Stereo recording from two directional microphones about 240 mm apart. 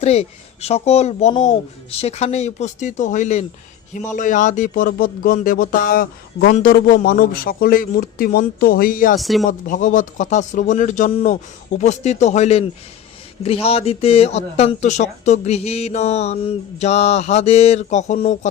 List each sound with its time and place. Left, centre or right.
0.0 s speech: left
9.1 s speech: centre
9.5 s speech: left